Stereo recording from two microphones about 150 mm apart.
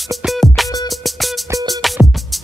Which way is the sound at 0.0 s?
Centre (ahead or behind).